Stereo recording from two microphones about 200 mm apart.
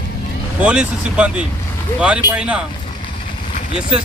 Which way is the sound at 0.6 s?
5° right (ahead or behind).